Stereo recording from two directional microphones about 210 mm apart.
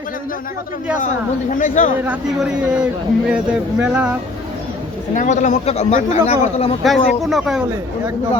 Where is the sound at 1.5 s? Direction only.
35° left (ahead or behind).